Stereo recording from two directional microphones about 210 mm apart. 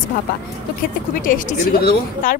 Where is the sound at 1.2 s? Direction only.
40° left (ahead or behind).